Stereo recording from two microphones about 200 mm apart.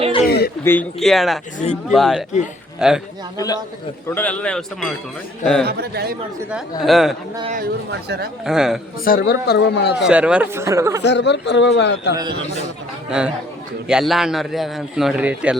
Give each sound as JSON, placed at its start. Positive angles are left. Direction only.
{"t": 0.3, "sound": "speech", "side_deg": 50}
{"t": 0.6, "sound": "a man's voice", "side_deg": 10}
{"t": 1.5, "sound": "speech", "side_deg": 35}
{"t": 1.9, "sound": "a man's voice", "side_deg": 0}
{"t": 3.3, "sound": "a man's voice", "side_deg": 15}
{"t": 5.6, "sound": "speech", "side_deg": -55}
{"t": 6.5, "sound": "a man's voice", "side_deg": 0}
{"t": 7.5, "sound": "speech", "side_deg": -50}
{"t": 8.4, "sound": "a man's voice", "side_deg": 0}
{"t": 9.0, "sound": "speech", "side_deg": 50}
{"t": 10.0, "sound": "speech", "side_deg": -5}
{"t": 11.0, "sound": "speech", "side_deg": 60}
{"t": 12.1, "sound": "a man's voice", "side_deg": -20}
{"t": 13.1, "sound": "a man's voice", "side_deg": -5}